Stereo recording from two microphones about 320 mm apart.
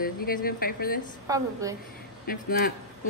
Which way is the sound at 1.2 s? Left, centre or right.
Centre.